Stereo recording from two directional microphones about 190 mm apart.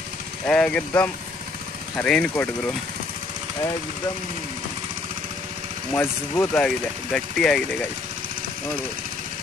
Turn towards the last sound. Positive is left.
turn(degrees=5)  # may be behind; listen again after turning